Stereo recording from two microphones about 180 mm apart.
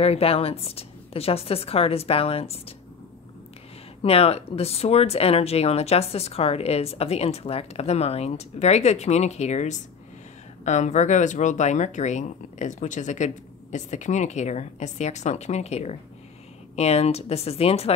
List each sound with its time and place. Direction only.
0.0 s speech: 35° left (ahead or behind)
4.0 s speech: 35° left (ahead or behind)